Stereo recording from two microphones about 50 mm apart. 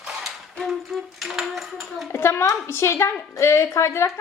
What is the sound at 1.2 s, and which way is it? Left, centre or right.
Speech, centre.